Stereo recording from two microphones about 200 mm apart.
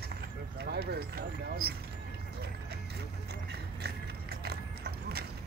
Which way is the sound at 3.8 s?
55° right (ahead or behind).